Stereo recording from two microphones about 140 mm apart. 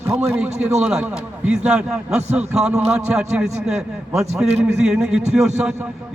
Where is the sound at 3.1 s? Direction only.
5° right (ahead or behind).